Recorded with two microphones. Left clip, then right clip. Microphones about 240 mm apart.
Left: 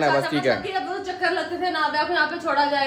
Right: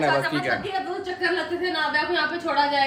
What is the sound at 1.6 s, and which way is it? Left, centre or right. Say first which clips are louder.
Speech: left 3 dB; left.